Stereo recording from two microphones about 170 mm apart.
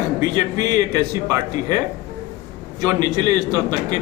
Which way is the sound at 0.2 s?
20° right (ahead or behind).